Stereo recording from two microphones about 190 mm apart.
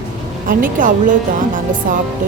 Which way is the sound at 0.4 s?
45° right (ahead or behind).